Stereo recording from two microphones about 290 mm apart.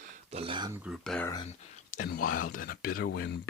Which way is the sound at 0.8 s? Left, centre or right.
Centre.